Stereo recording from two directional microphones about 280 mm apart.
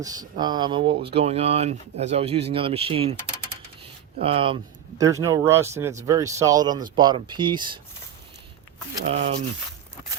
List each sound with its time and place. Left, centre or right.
0.0 s speech: centre
4.2 s speech: centre
9.0 s speech: right